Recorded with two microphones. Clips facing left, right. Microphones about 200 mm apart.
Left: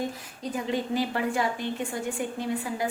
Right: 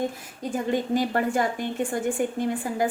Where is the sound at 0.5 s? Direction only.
50° right (ahead or behind).